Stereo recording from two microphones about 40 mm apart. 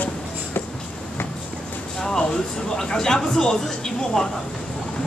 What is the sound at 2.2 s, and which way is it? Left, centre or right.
Speech, centre.